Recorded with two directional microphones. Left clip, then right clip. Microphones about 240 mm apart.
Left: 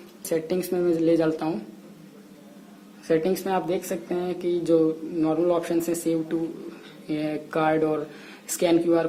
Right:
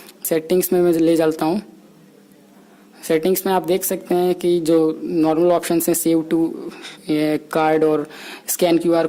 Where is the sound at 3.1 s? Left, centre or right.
Right.